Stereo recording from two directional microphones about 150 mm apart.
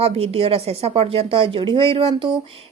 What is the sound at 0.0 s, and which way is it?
A woman's voice, 40° right (ahead or behind).